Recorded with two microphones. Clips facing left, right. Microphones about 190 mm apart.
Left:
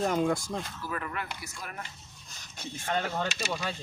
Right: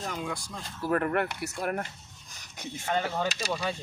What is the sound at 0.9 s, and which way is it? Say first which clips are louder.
Speech: right 15 dB; 60° right (ahead or behind).